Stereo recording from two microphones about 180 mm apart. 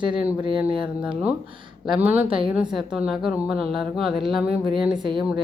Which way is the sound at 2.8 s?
5° right (ahead or behind).